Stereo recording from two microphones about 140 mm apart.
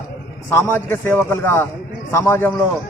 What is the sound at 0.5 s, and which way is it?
A man's voice, 15° left (ahead or behind).